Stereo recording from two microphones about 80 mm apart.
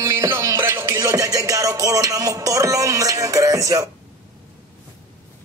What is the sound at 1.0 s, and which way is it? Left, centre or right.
Music, right.